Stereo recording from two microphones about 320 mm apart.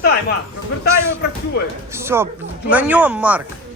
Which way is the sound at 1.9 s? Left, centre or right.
Centre.